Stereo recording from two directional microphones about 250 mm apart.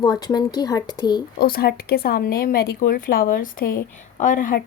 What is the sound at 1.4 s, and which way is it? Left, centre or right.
Speech, left.